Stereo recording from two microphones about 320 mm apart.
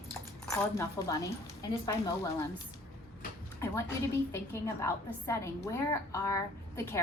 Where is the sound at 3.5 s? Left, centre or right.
Centre.